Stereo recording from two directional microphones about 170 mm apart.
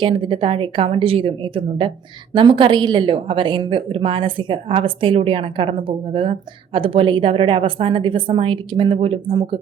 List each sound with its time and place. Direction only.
0.0 s a woman's voice: 30° right (ahead or behind)